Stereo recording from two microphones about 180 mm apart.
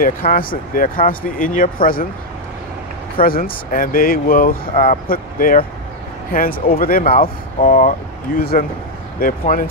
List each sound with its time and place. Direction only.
0.0 s speech: 50° left (ahead or behind)
3.2 s speech: 55° left (ahead or behind)